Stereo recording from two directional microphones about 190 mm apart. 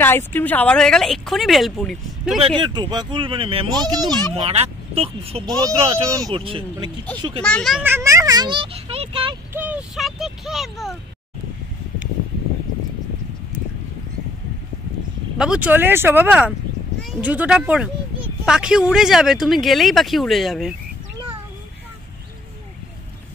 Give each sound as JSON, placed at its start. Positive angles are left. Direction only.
{"t": 0.0, "sound": "speech", "side_deg": 10}
{"t": 2.4, "sound": "speech", "side_deg": -25}
{"t": 4.5, "sound": "speech", "side_deg": -30}
{"t": 7.4, "sound": "speech", "side_deg": 5}
{"t": 7.8, "sound": "a child's voice", "side_deg": -15}
{"t": 9.5, "sound": "speech", "side_deg": -10}
{"t": 15.3, "sound": "speech", "side_deg": -5}